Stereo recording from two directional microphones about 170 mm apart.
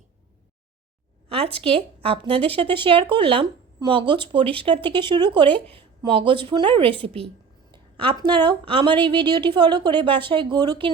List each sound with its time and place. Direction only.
1.6 s a woman's voice: 35° right (ahead or behind)